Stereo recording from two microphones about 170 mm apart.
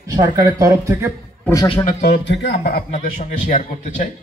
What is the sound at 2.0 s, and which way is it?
A man's voice, 80° left.